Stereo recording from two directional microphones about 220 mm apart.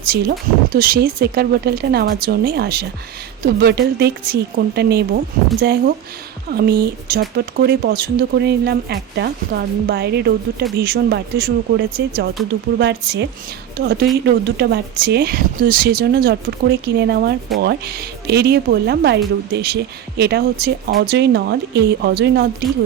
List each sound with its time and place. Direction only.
0.1 s speech: 45° right (ahead or behind)